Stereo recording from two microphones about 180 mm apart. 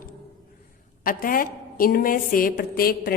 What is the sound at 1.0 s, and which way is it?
A woman's voice, 50° left (ahead or behind).